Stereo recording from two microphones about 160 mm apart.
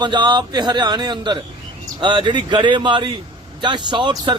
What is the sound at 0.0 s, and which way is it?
A man's voice, 30° right (ahead or behind).